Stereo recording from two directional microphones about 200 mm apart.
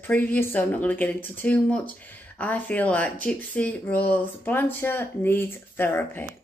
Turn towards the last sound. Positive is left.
turn(degrees=10)  # may be behind; listen again after turning